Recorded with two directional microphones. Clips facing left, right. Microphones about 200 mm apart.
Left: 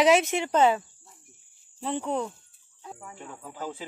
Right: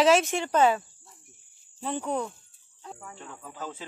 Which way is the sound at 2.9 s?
5° left (ahead or behind).